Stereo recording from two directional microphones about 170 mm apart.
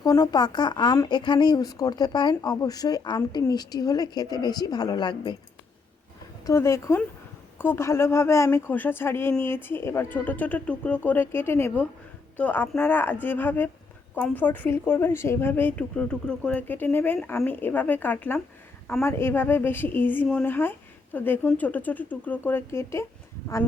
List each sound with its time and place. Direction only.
0.0 s a woman's voice: 20° left (ahead or behind)
6.4 s speech: 15° left (ahead or behind)